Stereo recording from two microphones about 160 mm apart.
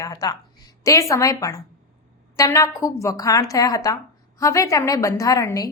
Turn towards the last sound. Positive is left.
turn(degrees=20)  # may be behind; listen again after turning